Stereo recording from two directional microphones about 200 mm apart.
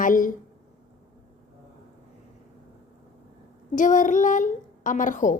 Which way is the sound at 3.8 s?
40° left (ahead or behind).